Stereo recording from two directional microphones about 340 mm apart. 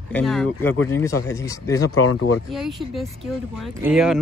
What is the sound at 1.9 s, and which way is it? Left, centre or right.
Speech, left.